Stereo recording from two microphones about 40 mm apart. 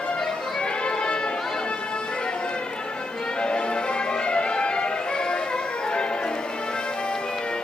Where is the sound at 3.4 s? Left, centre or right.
Left.